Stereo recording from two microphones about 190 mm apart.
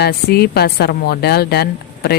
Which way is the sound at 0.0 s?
55° left (ahead or behind).